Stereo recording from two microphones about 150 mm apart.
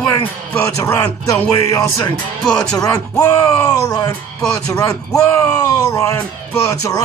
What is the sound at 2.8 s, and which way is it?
Speech, 20° left (ahead or behind).